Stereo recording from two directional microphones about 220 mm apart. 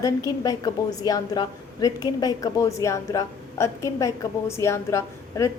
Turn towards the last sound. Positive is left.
turn(degrees=15)  # may be behind; listen again after turning